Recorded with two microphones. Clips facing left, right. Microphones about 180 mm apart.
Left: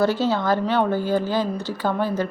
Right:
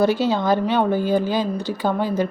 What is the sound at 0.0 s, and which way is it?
A woman's voice, 15° right (ahead or behind).